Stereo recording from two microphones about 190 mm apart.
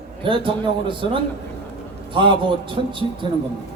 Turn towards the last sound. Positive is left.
turn(degrees=-25)  # may be behind; listen again after turning